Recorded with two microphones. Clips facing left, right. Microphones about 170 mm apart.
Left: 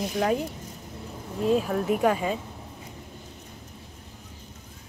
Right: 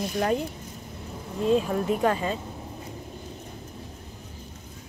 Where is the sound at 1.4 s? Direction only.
5° left (ahead or behind).